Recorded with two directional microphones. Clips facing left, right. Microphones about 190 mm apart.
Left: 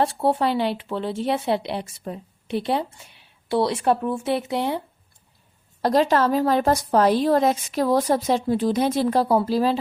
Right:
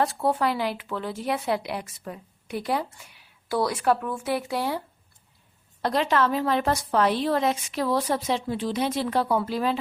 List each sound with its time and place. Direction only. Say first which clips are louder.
0.0 s speech: left 3 dB; 30° left (ahead or behind)
5.8 s a woman's voice: left 5 dB; 40° left (ahead or behind)